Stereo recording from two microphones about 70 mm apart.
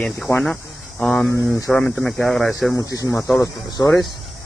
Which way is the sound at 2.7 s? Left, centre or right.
Left.